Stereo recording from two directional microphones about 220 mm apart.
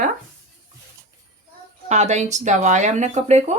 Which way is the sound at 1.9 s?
30° right (ahead or behind).